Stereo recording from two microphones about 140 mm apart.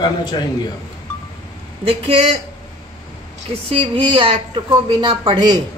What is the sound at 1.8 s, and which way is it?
Speech, 40° right (ahead or behind).